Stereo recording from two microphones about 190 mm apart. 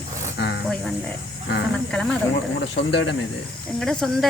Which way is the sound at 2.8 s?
65° left (ahead or behind).